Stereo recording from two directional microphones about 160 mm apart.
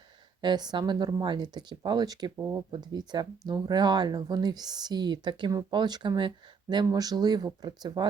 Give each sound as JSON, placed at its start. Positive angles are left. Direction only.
{"t": 0.4, "sound": "speech", "side_deg": -25}
{"t": 2.3, "sound": "speech", "side_deg": -15}
{"t": 2.6, "sound": "speech", "side_deg": -25}